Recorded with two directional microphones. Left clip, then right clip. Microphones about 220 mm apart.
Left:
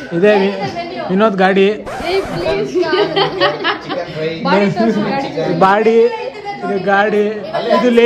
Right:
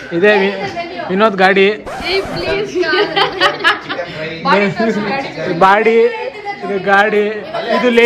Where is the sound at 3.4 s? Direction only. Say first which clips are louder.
Right 2 dB; 45° left (ahead or behind).